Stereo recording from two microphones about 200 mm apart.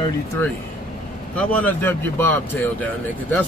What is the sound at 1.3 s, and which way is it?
Speech, 5° left (ahead or behind).